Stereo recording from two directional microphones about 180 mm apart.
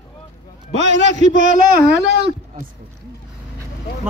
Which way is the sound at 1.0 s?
45° right (ahead or behind).